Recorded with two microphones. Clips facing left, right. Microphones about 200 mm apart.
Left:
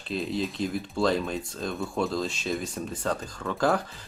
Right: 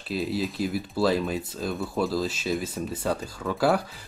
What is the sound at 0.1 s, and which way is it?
Speech, 5° right (ahead or behind).